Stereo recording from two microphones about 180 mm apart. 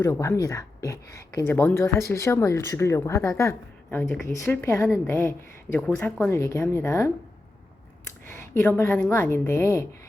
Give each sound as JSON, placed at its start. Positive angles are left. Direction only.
{"t": 0.0, "sound": "speech", "side_deg": 15}
{"t": 8.4, "sound": "speech", "side_deg": 10}